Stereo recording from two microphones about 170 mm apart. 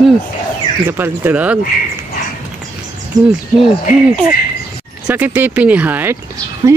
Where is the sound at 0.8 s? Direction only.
10° right (ahead or behind).